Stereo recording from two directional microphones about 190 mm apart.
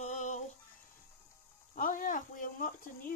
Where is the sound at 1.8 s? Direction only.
45° left (ahead or behind).